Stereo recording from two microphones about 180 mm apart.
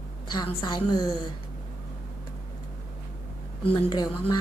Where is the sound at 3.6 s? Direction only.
30° left (ahead or behind).